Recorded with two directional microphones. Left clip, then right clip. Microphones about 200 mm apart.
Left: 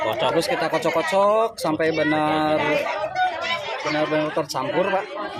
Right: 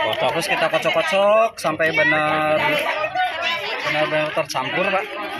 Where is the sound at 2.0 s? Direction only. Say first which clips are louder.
Right 4 dB; 20° left (ahead or behind).